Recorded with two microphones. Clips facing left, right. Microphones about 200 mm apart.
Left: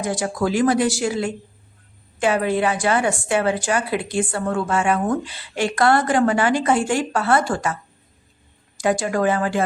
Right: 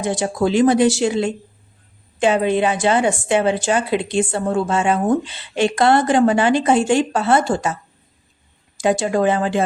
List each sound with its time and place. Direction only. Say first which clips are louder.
0.0 s a woman's voice: right 3 dB; 25° right (ahead or behind)
8.8 s a woman's voice: right 3 dB; 25° right (ahead or behind)